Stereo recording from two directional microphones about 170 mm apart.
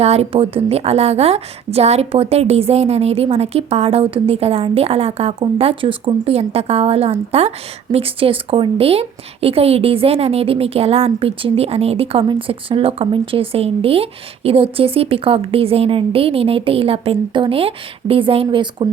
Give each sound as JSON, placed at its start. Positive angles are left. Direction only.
{"t": 0.0, "sound": "a woman's voice", "side_deg": -40}